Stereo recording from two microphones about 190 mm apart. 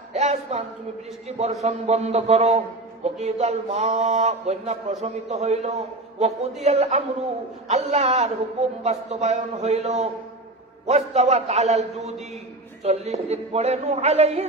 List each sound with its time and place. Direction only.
0.1 s a sound: 35° right (ahead or behind)
1.4 s a man's voice: 35° right (ahead or behind)
12.8 s a man's voice: 35° right (ahead or behind)